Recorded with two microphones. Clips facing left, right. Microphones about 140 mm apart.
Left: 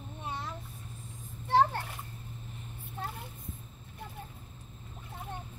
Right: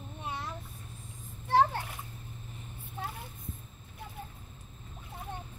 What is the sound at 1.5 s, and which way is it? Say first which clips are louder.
Splash: even; 10° right (ahead or behind).